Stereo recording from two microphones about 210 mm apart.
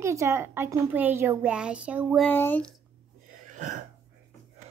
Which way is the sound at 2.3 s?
10° left (ahead or behind).